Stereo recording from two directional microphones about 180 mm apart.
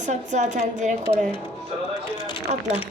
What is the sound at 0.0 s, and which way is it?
A woman's voice, 40° right (ahead or behind).